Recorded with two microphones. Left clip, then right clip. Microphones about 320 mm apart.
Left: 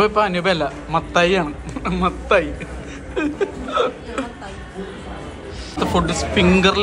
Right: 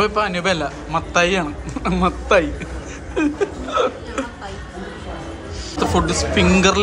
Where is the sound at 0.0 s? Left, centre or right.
Centre.